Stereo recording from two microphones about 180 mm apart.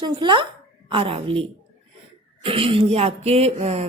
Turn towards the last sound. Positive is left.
turn(degrees=-35)  # may be behind; listen again after turning